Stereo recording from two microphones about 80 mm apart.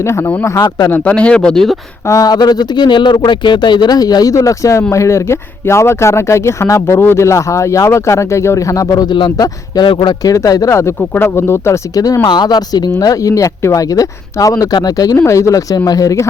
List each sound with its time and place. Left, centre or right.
0.0 s a man's voice: left
1.1 s speech: centre
2.0 s speech: left
9.0 s speech: left
9.8 s speech: left
10.2 s speech: left
10.8 s speech: left
11.9 s speech: left
12.2 s speech: left
15.3 s speech: left